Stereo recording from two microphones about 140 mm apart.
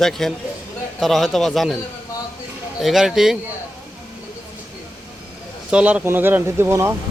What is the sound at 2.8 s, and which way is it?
Speech, centre (ahead or behind).